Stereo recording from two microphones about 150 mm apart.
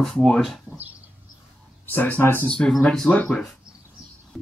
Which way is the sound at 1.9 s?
10° left (ahead or behind).